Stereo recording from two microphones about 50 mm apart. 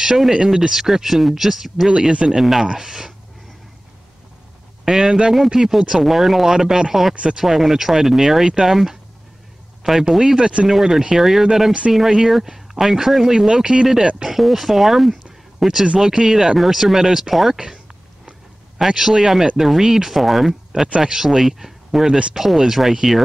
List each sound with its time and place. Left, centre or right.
0.0 s speech: centre
1.9 s speech: centre
4.8 s speech: centre
10.7 s speech: centre
18.8 s speech: centre